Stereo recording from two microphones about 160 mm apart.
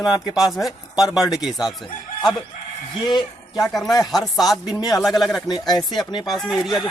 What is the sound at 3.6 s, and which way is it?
Speech, centre (ahead or behind).